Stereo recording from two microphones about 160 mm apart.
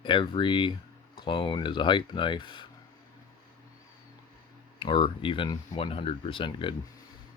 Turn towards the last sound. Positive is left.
turn(degrees=30)  # may be behind; listen again after turning